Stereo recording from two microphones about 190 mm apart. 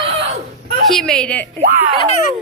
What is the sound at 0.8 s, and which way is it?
Speech, 5° left (ahead or behind).